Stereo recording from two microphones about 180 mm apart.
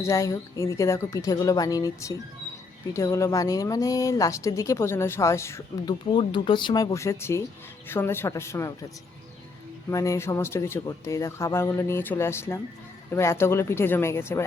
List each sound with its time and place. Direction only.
0.0 s speech: 15° left (ahead or behind)
9.9 s speech: 15° left (ahead or behind)